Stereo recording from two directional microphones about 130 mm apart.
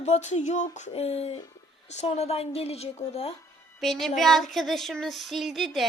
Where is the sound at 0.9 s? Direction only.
50° left (ahead or behind).